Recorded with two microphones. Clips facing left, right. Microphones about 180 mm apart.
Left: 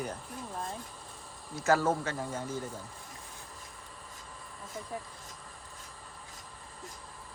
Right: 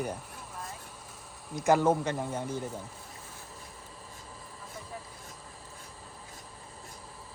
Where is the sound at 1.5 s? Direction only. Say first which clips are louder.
Right 3 dB; 15° right (ahead or behind).